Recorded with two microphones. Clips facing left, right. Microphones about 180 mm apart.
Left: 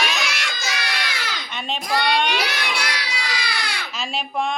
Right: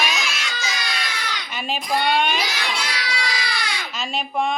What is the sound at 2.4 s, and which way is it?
Child singing, 65° left (ahead or behind).